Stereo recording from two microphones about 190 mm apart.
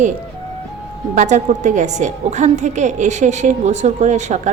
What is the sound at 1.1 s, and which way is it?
A woman's voice, 40° right (ahead or behind).